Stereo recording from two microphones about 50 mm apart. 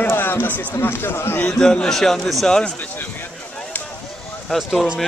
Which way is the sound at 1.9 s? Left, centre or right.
Centre.